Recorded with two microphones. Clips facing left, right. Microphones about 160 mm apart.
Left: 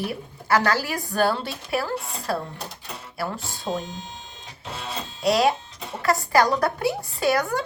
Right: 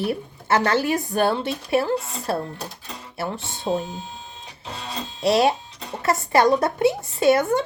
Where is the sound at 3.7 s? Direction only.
20° right (ahead or behind).